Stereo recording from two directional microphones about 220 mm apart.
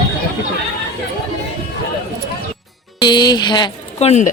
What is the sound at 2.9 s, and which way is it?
Speech, 20° left (ahead or behind).